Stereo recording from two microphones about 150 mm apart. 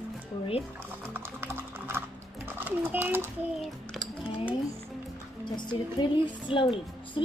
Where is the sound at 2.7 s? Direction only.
10° right (ahead or behind).